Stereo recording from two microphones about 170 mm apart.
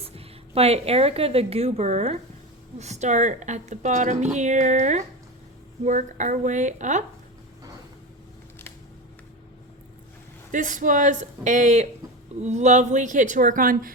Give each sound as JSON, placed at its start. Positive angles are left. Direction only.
{"t": 0.0, "sound": "a woman's voice", "side_deg": -35}
{"t": 10.5, "sound": "a woman's voice", "side_deg": -50}